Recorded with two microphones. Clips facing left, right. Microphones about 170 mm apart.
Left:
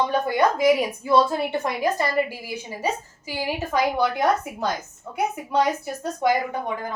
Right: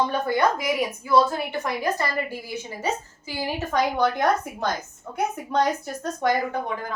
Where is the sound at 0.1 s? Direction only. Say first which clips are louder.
Left 2 dB; 15° left (ahead or behind).